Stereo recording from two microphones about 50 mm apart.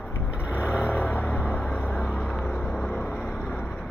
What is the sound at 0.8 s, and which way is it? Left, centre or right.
Vehicle, left.